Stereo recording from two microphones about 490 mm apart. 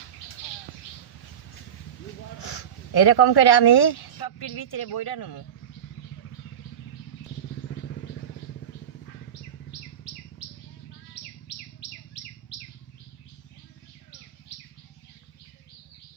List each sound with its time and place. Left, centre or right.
2.4 s speech: left